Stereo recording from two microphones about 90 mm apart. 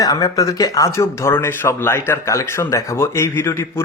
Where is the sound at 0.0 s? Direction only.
45° left (ahead or behind).